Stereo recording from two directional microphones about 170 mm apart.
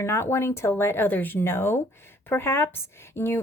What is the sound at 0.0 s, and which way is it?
A woman's voice, 15° left (ahead or behind).